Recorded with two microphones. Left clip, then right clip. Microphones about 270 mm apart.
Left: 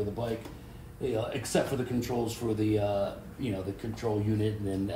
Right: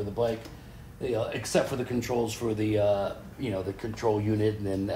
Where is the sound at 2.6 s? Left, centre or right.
Centre.